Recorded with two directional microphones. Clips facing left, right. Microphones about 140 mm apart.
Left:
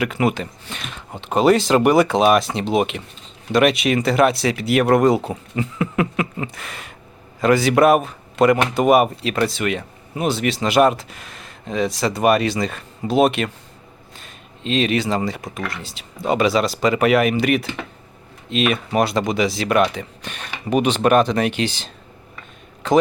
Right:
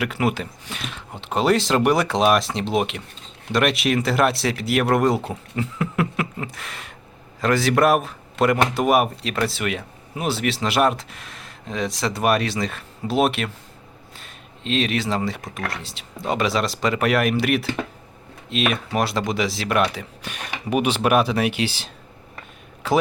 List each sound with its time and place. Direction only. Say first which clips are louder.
0.0 s speech: left 3 dB; centre (ahead or behind)
22.8 s a man's voice: left 4 dB; 5° right (ahead or behind)